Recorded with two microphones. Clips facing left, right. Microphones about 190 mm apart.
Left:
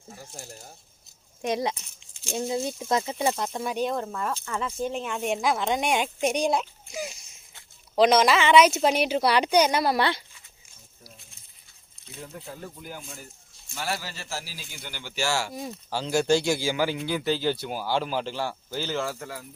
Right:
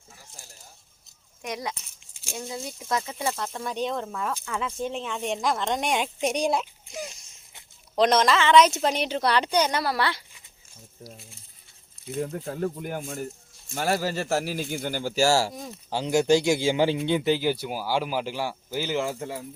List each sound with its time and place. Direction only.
0.1 s speech: 45° left (ahead or behind)
1.4 s a woman's voice: 30° left (ahead or behind)
12.1 s a man's voice: 50° right (ahead or behind)
15.9 s speech: 20° right (ahead or behind)